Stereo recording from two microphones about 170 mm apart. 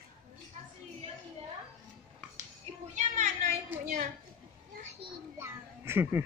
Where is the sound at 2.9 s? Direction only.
45° right (ahead or behind).